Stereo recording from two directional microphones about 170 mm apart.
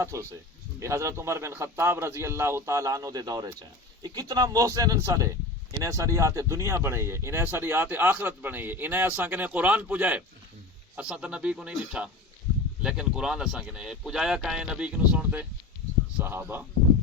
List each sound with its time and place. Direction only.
0.0 s speech: 15° right (ahead or behind)